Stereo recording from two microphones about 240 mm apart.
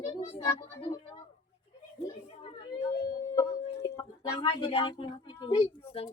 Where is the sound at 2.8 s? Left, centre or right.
Centre.